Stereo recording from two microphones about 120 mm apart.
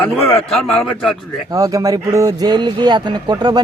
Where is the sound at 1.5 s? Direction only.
30° right (ahead or behind).